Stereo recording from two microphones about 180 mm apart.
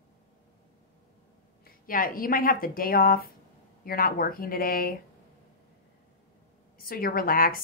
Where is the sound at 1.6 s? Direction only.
50° left (ahead or behind).